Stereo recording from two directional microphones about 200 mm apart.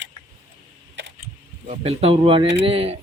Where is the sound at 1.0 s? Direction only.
60° right (ahead or behind).